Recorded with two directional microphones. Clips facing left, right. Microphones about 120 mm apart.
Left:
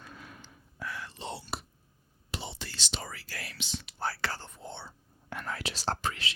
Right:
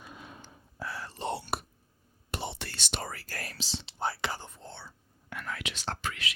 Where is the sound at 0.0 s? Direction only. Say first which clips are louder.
Right 1 dB; 20° right (ahead or behind).